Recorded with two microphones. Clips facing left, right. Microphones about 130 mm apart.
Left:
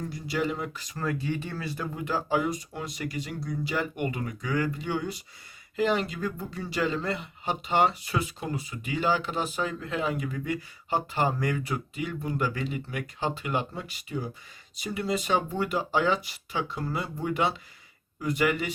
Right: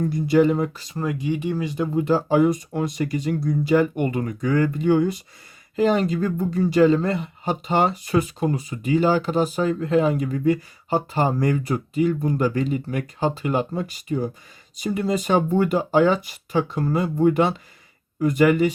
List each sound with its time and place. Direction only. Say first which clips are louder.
0.0 s speech: right 12 dB; 50° right (ahead or behind)
0.9 s speech: right 6 dB; 20° right (ahead or behind); by 18.7 s 45° right (ahead or behind)